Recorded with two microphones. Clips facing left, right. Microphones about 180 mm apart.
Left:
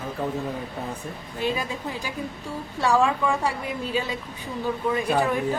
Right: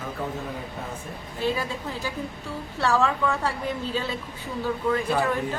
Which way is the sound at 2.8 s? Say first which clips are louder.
Left 2 dB; 15° left (ahead or behind).